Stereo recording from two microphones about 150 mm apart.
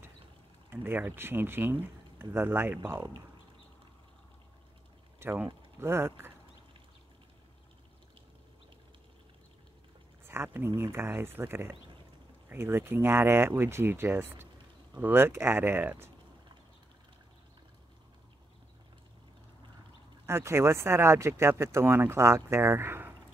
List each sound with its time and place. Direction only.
0.7 s speech: 15° right (ahead or behind)
5.2 s speech: 15° right (ahead or behind)
10.2 s a sound: 15° right (ahead or behind)
10.8 s speech: 15° right (ahead or behind)
20.2 s speech: 15° right (ahead or behind)